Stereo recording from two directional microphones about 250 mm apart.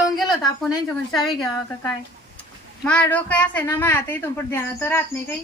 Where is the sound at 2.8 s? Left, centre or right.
Centre.